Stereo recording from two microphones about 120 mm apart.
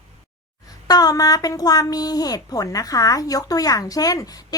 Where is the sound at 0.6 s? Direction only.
30° left (ahead or behind).